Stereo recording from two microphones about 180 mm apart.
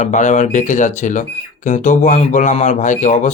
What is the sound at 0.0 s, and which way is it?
A man's voice, 45° left (ahead or behind).